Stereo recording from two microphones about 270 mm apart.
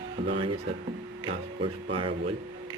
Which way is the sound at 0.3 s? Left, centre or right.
Centre.